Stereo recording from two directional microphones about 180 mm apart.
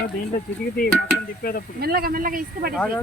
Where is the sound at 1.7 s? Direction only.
60° right (ahead or behind).